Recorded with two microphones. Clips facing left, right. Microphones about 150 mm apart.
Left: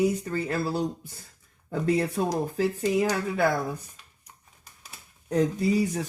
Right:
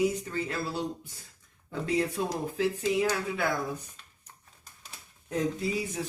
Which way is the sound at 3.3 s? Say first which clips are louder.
Left 6 dB; 40° left (ahead or behind).